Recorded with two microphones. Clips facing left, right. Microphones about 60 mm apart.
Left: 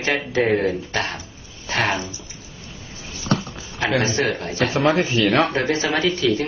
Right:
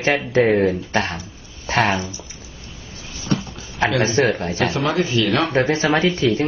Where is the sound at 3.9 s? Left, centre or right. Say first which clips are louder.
Right 2 dB; right.